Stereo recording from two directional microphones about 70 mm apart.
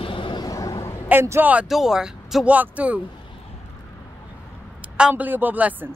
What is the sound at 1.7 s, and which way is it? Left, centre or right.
Speech, centre.